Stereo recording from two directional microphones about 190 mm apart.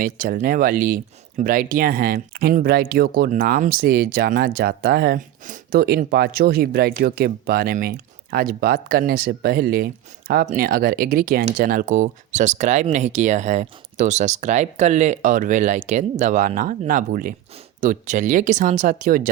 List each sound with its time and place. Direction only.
0.0 s speech: 45° right (ahead or behind)